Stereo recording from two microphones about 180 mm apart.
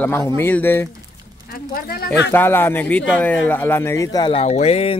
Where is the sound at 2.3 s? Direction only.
10° left (ahead or behind).